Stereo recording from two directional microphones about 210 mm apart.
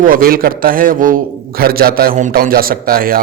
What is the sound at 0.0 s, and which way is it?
A man's voice, 45° right (ahead or behind).